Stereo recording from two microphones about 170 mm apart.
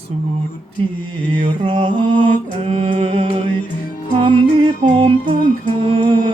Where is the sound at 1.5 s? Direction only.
30° right (ahead or behind).